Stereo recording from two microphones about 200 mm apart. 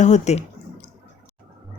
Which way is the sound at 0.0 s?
35° left (ahead or behind).